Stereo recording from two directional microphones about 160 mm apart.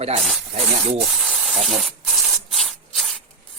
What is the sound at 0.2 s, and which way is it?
Rub, centre (ahead or behind).